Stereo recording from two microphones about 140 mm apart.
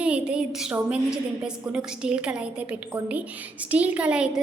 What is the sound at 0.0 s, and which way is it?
A woman's voice, 10° right (ahead or behind).